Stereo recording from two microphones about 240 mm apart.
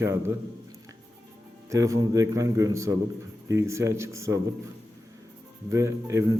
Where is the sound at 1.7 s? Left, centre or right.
Centre.